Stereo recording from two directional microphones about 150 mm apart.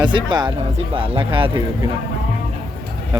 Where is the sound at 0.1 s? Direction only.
30° right (ahead or behind).